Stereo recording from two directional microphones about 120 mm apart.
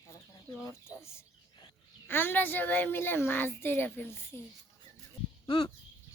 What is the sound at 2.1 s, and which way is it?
A woman's voice, 15° left (ahead or behind).